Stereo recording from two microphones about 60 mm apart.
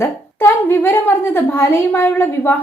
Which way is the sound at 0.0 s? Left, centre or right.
Left.